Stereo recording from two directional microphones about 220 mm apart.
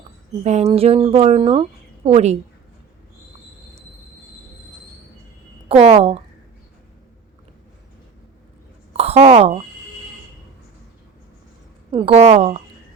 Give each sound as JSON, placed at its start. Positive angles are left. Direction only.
{"t": 0.4, "sound": "speech", "side_deg": -30}
{"t": 5.6, "sound": "speech", "side_deg": -30}
{"t": 8.9, "sound": "a sound", "side_deg": -30}
{"t": 11.9, "sound": "speech", "side_deg": -25}